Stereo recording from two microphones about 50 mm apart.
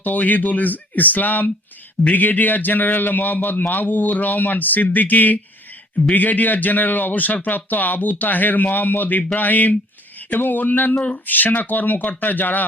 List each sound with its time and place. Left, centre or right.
0.0 s a man's voice: left